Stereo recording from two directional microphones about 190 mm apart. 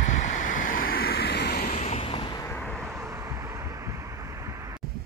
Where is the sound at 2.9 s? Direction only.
15° right (ahead or behind).